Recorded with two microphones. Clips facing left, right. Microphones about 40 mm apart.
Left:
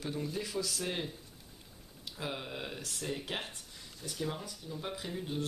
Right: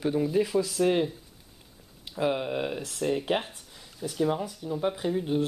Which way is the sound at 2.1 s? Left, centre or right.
Right.